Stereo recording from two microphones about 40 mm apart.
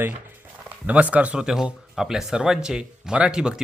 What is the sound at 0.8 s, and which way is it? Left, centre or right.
Speech, right.